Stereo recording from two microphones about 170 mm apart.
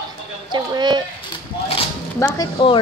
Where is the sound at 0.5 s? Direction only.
25° right (ahead or behind).